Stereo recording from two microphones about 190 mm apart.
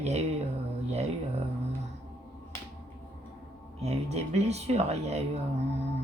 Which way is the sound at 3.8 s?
35° right (ahead or behind).